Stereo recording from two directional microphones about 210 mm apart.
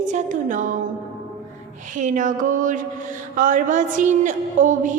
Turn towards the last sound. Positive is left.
turn(degrees=-40)  # may be behind; listen again after turning